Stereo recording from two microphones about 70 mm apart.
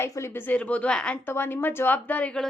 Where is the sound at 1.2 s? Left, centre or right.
Left.